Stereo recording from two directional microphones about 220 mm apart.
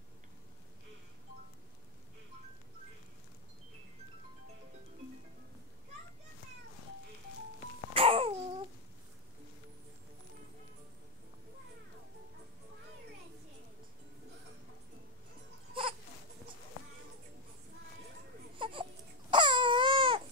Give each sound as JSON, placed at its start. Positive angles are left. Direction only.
{"t": 7.9, "sound": "babbling", "side_deg": -25}
{"t": 15.7, "sound": "baby cry", "side_deg": -25}
{"t": 18.6, "sound": "baby cry", "side_deg": -25}